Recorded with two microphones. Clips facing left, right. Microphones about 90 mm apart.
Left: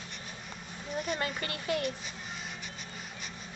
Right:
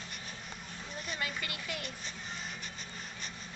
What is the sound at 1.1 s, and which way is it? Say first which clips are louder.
Speech: left 4 dB; 35° left (ahead or behind).